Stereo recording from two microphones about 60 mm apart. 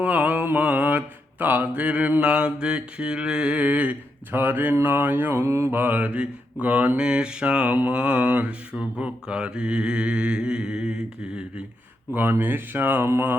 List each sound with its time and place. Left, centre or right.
0.0 s mantra: right
4.7 s speech: right
5.3 s mantra: right
5.7 s mantra: right; by 11.6 s centre
12.1 s speech: right